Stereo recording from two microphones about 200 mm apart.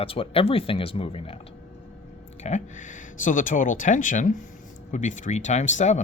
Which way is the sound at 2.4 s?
35° left (ahead or behind).